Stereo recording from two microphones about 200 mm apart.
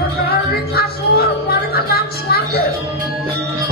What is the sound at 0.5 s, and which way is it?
Music, 50° left (ahead or behind).